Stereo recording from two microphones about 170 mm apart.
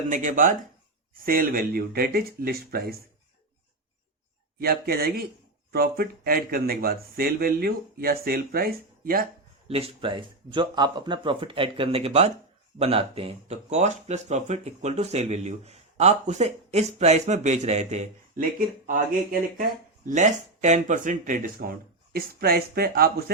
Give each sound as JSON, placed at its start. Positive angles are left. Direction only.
{"t": 0.1, "sound": "a man's voice", "side_deg": -50}
{"t": 4.6, "sound": "a man's voice", "side_deg": -65}
{"t": 9.6, "sound": "speech", "side_deg": -35}
{"t": 18.9, "sound": "speech", "side_deg": -55}